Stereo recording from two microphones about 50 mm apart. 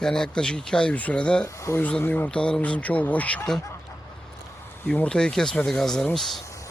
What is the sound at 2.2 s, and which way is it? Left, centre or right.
Speech, left.